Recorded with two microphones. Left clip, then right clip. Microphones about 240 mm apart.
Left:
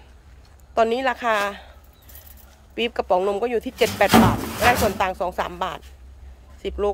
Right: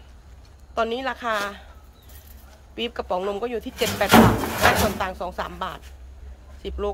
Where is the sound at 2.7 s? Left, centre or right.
Centre.